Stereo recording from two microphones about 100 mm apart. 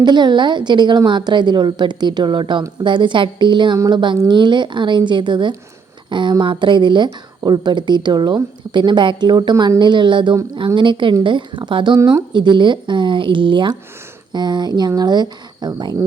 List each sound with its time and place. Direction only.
0.0 s a woman's voice: 50° right (ahead or behind)